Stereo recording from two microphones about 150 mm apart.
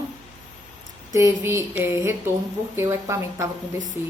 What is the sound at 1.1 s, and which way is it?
A woman's voice, 20° right (ahead or behind).